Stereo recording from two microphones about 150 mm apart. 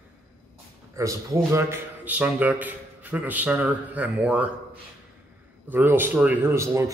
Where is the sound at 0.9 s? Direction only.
20° right (ahead or behind).